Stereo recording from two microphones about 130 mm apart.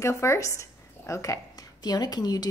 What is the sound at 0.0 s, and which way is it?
Speech, 20° left (ahead or behind).